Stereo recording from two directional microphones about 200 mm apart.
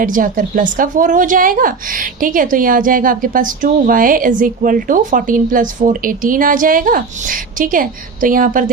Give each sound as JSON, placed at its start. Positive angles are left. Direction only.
{"t": 0.0, "sound": "a woman's voice", "side_deg": -45}